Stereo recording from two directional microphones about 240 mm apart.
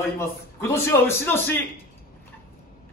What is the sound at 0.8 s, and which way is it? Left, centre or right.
Speech, centre.